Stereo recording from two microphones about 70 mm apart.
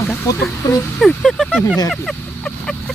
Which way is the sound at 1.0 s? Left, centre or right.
Centre.